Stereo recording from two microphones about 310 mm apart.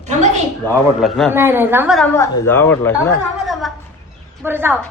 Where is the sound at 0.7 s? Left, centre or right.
Centre.